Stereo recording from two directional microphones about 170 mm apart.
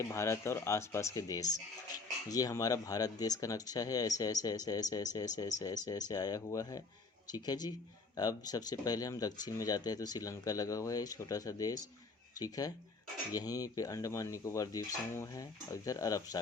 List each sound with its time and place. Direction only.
0.0 s speech: 15° left (ahead or behind)